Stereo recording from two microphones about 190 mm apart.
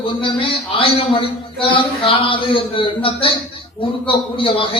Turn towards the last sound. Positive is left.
turn(degrees=30)  # may be behind; listen again after turning